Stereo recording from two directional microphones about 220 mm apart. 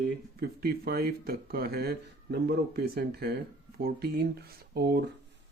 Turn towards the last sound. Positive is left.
turn(degrees=-45)  # may be behind; listen again after turning